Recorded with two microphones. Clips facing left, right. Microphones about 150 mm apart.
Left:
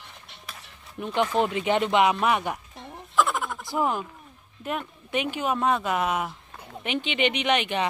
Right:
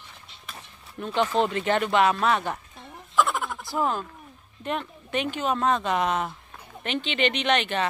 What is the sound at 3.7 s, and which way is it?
A child's voice, 15° left (ahead or behind).